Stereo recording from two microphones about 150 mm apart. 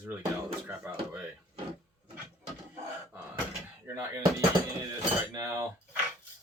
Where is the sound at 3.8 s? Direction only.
20° right (ahead or behind).